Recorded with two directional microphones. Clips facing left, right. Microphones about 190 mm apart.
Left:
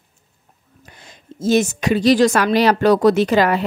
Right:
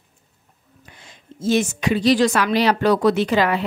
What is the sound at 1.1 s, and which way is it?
Speech, 40° left (ahead or behind).